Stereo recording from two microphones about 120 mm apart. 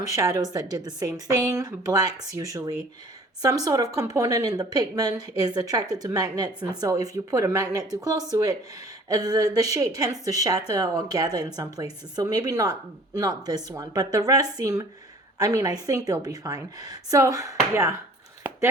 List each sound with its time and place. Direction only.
0.2 s a woman's voice: 30° right (ahead or behind)